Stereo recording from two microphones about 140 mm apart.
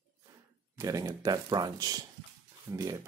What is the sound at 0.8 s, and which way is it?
Speech, 25° right (ahead or behind).